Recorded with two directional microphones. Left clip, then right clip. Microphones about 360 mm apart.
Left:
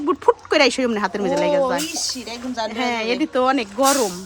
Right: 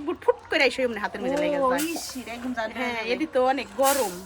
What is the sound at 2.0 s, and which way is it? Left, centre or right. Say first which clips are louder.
Speech: left 6 dB; centre.